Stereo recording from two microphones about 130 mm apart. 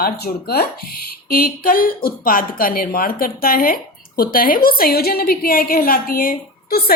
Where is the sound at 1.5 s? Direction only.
90° left.